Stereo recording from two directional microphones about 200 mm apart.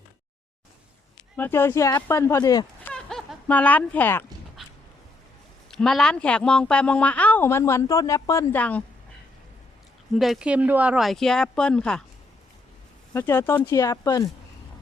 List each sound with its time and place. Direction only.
1.4 s speech: 10° left (ahead or behind)
2.8 s goat: 5° left (ahead or behind)
4.6 s a sound: centre (ahead or behind)
5.7 s speech: centre (ahead or behind)
10.1 s speech: centre (ahead or behind)
13.1 s speech: 10° left (ahead or behind)